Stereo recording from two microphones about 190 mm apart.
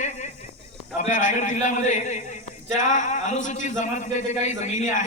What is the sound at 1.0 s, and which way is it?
A man's voice, 40° left (ahead or behind).